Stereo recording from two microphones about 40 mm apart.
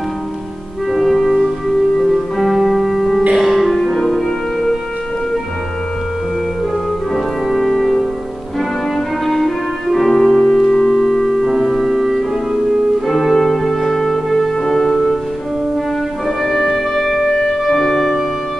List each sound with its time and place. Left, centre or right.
0.9 s music: centre
7.5 s music: centre
9.2 s music: centre
16.4 s music: centre
17.3 s music: centre